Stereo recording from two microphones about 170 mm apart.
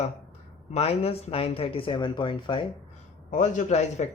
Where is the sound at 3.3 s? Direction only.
50° left (ahead or behind).